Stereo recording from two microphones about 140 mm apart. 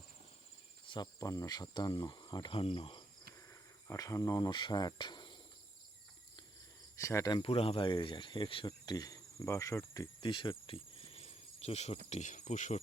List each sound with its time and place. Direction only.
0.9 s speech: 30° left (ahead or behind)
3.8 s speech: 25° left (ahead or behind)
6.9 s speech: 20° left (ahead or behind)
7.4 s speech: 45° left (ahead or behind); by 10.1 s 25° left (ahead or behind)
10.2 s cricket: 35° left (ahead or behind)
12.0 s speech: 55° left (ahead or behind)